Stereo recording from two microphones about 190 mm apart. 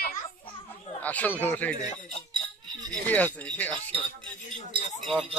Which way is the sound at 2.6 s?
20° right (ahead or behind).